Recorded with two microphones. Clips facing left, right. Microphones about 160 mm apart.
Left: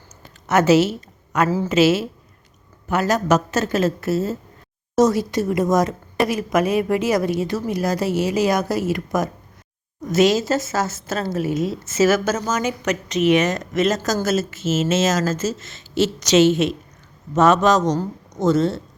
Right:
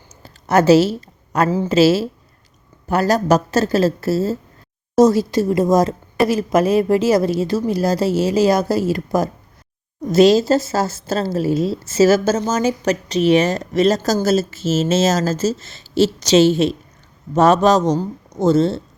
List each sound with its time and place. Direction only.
0.2 s a sound: 35° right (ahead or behind)
1.5 s speech: 20° right (ahead or behind)
1.7 s a woman's voice: 35° right (ahead or behind)